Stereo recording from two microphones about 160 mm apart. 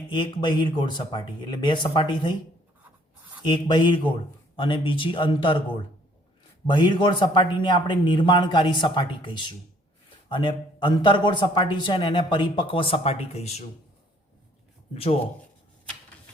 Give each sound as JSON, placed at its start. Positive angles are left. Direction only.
{"t": 0.1, "sound": "speech", "side_deg": 30}
{"t": 3.4, "sound": "a man's voice", "side_deg": 30}
{"t": 6.7, "sound": "a man's voice", "side_deg": 30}
{"t": 14.9, "sound": "a man's voice", "side_deg": 35}